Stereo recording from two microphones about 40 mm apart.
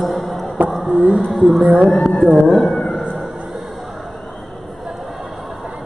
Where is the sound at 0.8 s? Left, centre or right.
Right.